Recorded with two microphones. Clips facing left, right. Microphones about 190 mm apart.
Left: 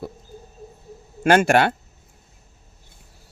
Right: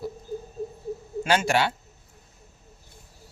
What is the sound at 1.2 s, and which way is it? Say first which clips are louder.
Speech: left 7 dB; 55° left (ahead or behind).